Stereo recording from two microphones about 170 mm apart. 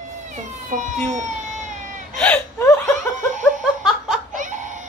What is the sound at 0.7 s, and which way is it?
Speech, 45° right (ahead or behind).